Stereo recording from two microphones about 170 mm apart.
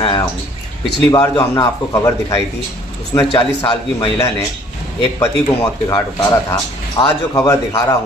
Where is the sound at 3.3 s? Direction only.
30° left (ahead or behind).